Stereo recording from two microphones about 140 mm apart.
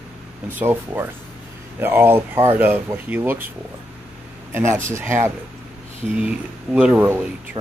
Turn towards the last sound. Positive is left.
turn(degrees=-10)  # may be behind; listen again after turning